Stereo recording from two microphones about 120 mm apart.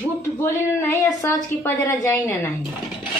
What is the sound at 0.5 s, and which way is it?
A woman's voice, 20° left (ahead or behind).